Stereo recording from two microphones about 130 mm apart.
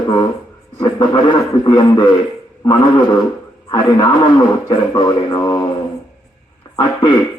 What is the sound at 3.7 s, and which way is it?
A man's voice, 30° left (ahead or behind).